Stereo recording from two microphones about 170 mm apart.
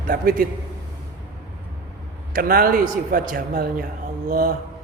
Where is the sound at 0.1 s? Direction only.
55° right (ahead or behind).